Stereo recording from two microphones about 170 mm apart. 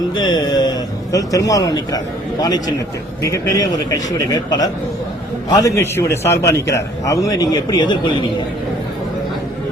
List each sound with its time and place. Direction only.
0.1 s a man's voice: 25° left (ahead or behind)